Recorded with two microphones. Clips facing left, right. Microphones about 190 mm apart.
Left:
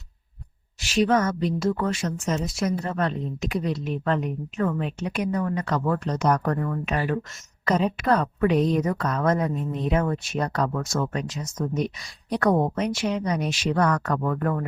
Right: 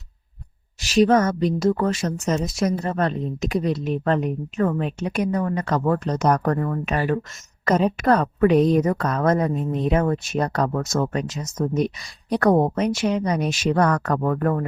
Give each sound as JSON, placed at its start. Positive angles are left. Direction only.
{"t": 0.8, "sound": "speech", "side_deg": -40}